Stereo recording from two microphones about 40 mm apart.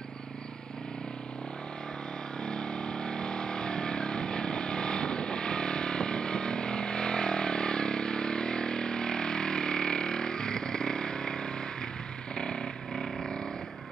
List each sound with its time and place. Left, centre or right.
2.4 s a sound: left
12.4 s vehicle: left
12.9 s vehicle: centre